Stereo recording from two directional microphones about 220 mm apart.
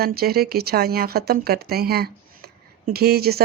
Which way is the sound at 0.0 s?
45° right (ahead or behind).